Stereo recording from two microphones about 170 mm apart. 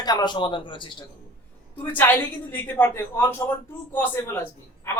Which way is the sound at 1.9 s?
10° left (ahead or behind).